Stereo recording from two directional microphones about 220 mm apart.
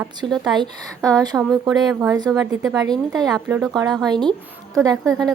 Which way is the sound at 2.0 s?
15° right (ahead or behind).